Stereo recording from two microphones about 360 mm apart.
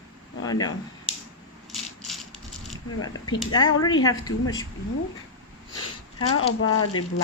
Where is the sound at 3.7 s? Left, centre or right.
Left.